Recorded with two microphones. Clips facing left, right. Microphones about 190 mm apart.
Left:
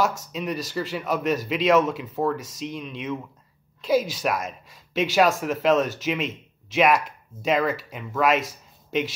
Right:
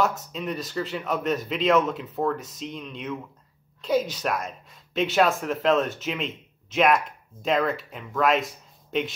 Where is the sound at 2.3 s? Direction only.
80° left.